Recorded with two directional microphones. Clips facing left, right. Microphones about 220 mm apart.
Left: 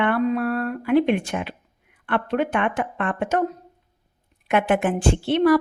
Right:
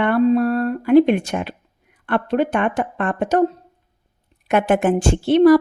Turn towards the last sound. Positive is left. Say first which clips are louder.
# right 6 dB
turn(degrees=-40)  # may be behind; listen again after turning